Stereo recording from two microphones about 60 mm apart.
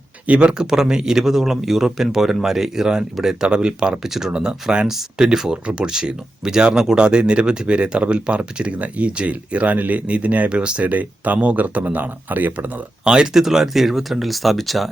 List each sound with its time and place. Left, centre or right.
0.3 s a man's voice: centre
13.1 s speech: centre